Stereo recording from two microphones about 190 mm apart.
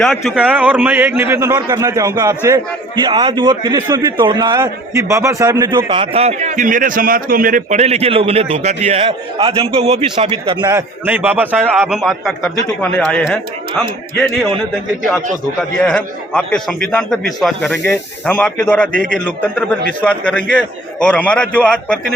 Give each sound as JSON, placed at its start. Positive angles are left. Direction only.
{"t": 0.0, "sound": "a man's voice", "side_deg": 0}
{"t": 15.8, "sound": "a man's voice", "side_deg": 5}